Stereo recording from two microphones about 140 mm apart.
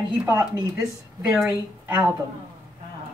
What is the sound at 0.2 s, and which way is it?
Speech, 20° right (ahead or behind).